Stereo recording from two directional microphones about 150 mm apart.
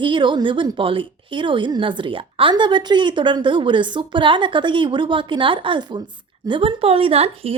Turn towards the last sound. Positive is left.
turn(degrees=-40)  # may be behind; listen again after turning